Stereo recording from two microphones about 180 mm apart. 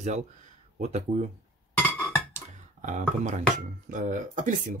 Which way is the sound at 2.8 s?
45° right (ahead or behind).